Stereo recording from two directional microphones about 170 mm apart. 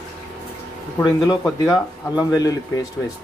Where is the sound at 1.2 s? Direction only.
20° left (ahead or behind).